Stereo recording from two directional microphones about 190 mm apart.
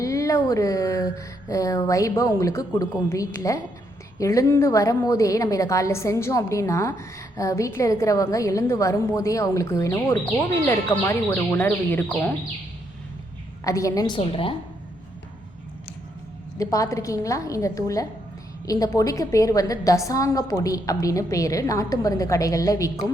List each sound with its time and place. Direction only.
0.0 s a woman's voice: 15° left (ahead or behind)
13.7 s a woman's voice: 15° left (ahead or behind)
16.6 s a woman's voice: 15° left (ahead or behind)